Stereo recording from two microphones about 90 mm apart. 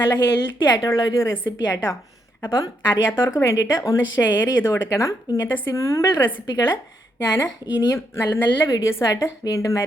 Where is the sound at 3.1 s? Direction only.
30° left (ahead or behind).